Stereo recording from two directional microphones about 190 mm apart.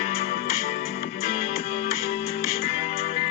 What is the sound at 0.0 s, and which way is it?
Music, 50° left (ahead or behind).